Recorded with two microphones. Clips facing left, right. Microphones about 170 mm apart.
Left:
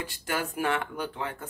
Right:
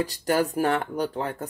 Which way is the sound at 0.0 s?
40° right (ahead or behind).